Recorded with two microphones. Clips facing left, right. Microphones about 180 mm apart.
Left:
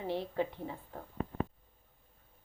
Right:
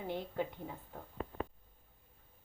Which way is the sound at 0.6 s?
5° left (ahead or behind).